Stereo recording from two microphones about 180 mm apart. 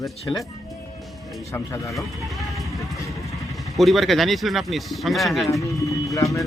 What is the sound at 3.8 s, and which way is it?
Speech, centre (ahead or behind).